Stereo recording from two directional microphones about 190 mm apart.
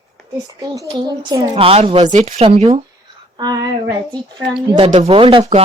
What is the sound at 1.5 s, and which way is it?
Speech, 35° right (ahead or behind).